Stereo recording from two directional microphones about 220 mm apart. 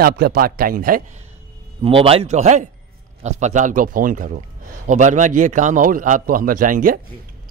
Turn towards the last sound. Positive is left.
turn(degrees=-40)  # may be behind; listen again after turning